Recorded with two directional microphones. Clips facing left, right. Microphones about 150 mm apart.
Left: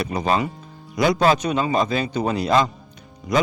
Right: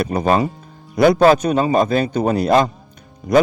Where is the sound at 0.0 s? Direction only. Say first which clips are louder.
Right 5 dB; 50° right (ahead or behind).